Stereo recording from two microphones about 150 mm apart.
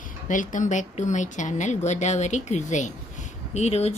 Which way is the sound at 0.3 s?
60° left (ahead or behind).